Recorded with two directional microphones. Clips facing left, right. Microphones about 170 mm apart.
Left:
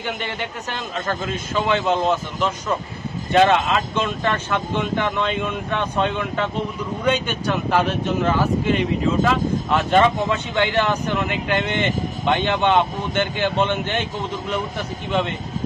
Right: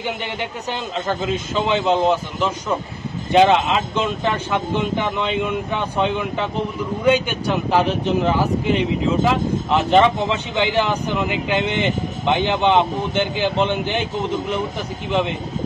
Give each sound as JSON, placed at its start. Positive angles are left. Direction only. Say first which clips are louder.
{"t": 0.0, "sound": "speech", "louder": "right 1 dB", "side_deg": -15}